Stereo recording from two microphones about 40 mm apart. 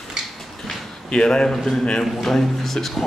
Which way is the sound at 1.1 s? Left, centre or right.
Centre.